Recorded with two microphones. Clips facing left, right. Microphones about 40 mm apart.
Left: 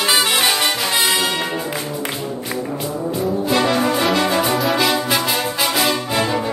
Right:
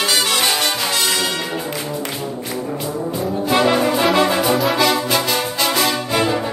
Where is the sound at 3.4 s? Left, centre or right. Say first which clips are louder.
Right 3 dB; centre.